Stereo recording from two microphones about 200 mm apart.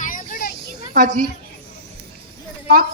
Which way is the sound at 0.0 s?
45° left (ahead or behind).